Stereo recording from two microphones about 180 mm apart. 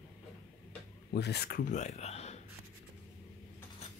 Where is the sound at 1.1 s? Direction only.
65° left (ahead or behind).